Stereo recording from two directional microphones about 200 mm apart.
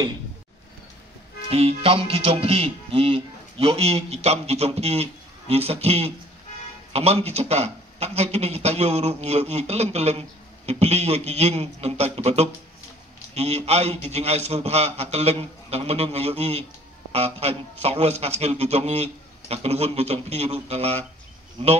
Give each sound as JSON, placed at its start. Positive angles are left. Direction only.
{"t": 1.5, "sound": "speech", "side_deg": -30}